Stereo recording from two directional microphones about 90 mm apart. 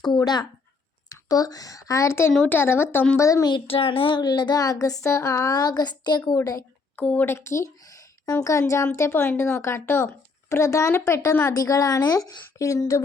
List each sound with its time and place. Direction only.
1.1 s a woman's voice: 45° left (ahead or behind)
3.7 s a woman's voice: 90° left; by 6.3 s 50° left (ahead or behind)
6.3 s a woman's voice: 35° left (ahead or behind)
6.9 s speech: 15° left (ahead or behind)
7.3 s a woman's voice: 30° left (ahead or behind)
11.5 s a woman's voice: 40° left (ahead or behind)